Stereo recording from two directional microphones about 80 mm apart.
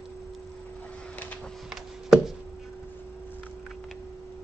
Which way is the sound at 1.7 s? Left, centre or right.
Centre.